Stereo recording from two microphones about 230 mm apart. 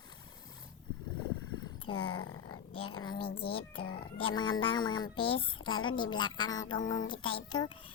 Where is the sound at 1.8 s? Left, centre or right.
Left.